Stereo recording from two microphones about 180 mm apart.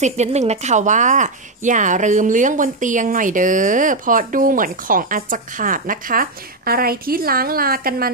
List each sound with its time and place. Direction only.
0.0 s speech: 40° right (ahead or behind); by 8.1 s 55° right (ahead or behind)